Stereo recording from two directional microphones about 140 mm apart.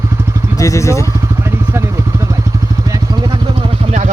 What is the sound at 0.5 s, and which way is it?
Vehicle, 25° left (ahead or behind).